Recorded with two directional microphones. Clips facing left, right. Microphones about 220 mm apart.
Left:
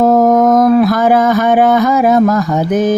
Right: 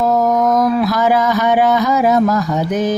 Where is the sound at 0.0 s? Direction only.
50° left (ahead or behind).